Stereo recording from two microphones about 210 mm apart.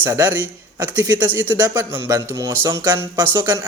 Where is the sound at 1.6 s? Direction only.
15° right (ahead or behind).